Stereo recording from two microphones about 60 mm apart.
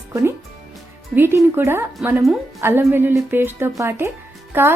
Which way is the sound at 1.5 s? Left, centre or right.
Right.